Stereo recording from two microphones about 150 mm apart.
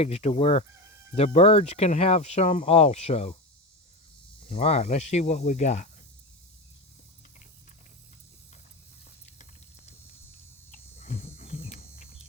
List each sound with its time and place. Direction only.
0.0 s speech: 45° left (ahead or behind)
4.5 s speech: 45° left (ahead or behind)
11.5 s a sound: 40° left (ahead or behind)